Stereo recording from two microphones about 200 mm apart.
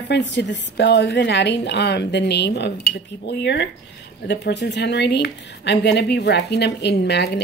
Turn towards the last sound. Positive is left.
turn(degrees=55)  # may be behind; listen again after turning